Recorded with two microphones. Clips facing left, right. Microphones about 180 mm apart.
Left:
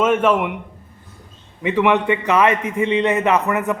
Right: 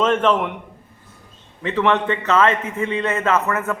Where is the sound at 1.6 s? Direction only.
10° left (ahead or behind).